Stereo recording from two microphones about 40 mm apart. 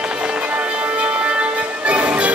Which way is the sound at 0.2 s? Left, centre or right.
Right.